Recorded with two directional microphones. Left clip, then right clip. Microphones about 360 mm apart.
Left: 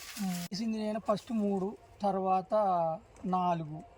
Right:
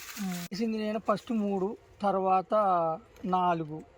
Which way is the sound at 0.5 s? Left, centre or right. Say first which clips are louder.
Right 5 dB; centre.